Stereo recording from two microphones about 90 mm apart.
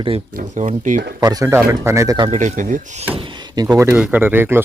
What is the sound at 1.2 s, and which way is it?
Speech, 40° right (ahead or behind).